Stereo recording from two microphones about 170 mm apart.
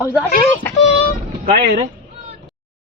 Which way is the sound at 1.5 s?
70° right (ahead or behind).